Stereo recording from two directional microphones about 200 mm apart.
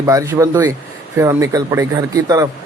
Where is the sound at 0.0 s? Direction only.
15° right (ahead or behind).